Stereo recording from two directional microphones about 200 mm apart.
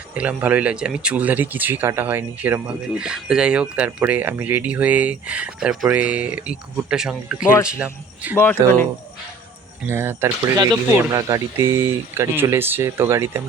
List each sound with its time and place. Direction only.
0.2 s speech: 5° right (ahead or behind)
9.8 s speech: 10° right (ahead or behind)